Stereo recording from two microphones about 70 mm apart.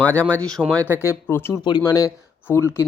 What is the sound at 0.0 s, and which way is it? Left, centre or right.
Speech, left.